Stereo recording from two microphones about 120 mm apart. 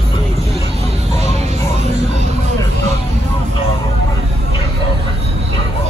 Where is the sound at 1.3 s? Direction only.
65° right (ahead or behind).